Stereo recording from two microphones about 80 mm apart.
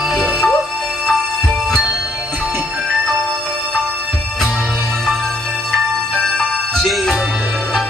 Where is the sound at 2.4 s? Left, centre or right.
Centre.